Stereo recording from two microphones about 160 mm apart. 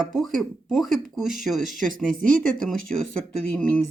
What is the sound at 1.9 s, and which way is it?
Speech, 60° right (ahead or behind).